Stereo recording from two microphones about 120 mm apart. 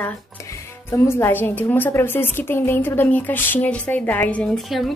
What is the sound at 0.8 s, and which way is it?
A woman's voice, 20° left (ahead or behind).